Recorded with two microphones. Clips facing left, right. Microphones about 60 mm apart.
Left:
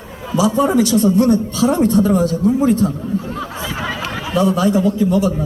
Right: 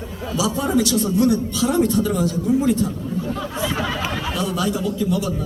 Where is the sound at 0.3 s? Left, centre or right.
Left.